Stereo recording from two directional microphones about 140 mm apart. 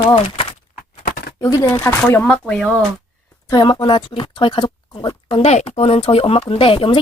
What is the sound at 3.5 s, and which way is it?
Speech, 35° left (ahead or behind).